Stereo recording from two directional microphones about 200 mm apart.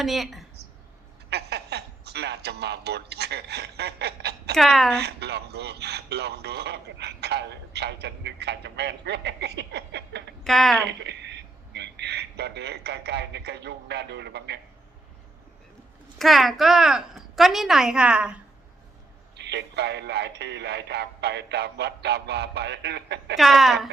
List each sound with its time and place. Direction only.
0.0 s a woman's voice: centre (ahead or behind)
1.3 s a sound: 55° right (ahead or behind)
4.5 s a woman's voice: centre (ahead or behind)
4.9 s a man's voice: 55° right (ahead or behind)
10.4 s a woman's voice: centre (ahead or behind)
10.8 s a man's voice: 60° right (ahead or behind)
16.1 s a woman's voice: centre (ahead or behind)
19.4 s a man's voice: 60° right (ahead or behind)
23.4 s a woman's voice: centre (ahead or behind)